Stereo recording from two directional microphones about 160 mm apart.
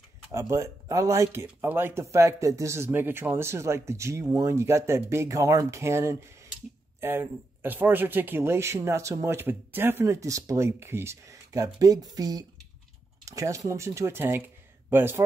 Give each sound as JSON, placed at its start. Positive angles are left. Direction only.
{"t": 0.3, "sound": "speech", "side_deg": -20}